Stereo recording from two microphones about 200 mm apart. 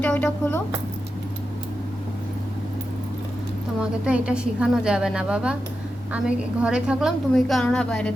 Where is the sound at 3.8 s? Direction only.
5° right (ahead or behind).